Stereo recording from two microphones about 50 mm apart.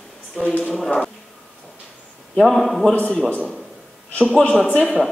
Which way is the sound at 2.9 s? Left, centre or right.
Left.